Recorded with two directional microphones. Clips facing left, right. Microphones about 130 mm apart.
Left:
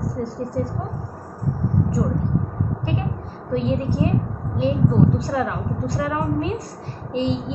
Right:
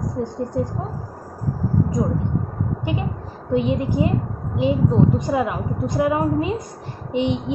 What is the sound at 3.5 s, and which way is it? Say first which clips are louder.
A woman's voice: right 2 dB; 15° right (ahead or behind).